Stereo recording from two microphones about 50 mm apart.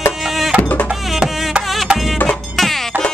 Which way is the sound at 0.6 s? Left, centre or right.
Left.